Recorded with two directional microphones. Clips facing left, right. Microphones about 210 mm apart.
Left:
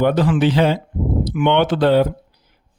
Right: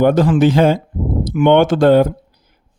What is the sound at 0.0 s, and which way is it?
A man's voice, 45° right (ahead or behind).